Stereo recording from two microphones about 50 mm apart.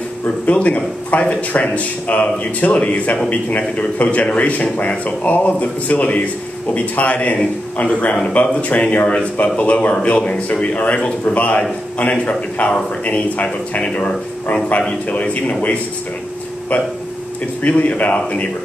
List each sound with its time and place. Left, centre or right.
0.5 s speech: left
17.6 s speech: left